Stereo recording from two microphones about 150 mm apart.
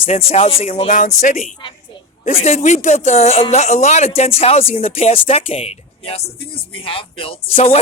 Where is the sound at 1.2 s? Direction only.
55° left (ahead or behind).